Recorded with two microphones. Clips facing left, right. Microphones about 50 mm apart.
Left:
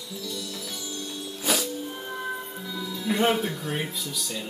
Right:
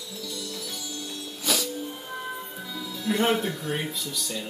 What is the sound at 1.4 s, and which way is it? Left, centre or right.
Music, left.